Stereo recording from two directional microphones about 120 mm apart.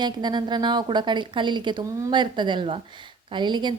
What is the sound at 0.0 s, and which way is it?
A woman's voice, 35° right (ahead or behind).